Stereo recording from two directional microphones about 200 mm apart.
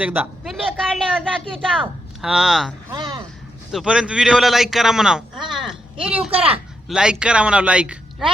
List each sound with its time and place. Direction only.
0.0 s a man's voice: 5° right (ahead or behind)
5.5 s a sound: centre (ahead or behind)
6.3 s speech: 30° right (ahead or behind)
6.8 s a man's voice: 5° right (ahead or behind)